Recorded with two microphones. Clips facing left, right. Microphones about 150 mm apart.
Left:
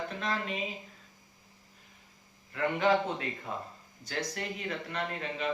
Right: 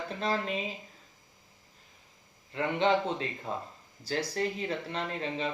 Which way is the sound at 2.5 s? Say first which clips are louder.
Even; 25° right (ahead or behind).